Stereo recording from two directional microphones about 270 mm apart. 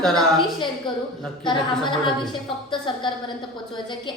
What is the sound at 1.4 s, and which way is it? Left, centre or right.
Speech, centre.